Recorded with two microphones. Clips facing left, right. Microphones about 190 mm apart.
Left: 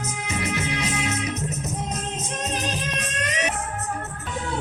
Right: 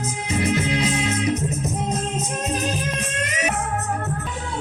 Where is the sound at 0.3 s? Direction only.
30° right (ahead or behind).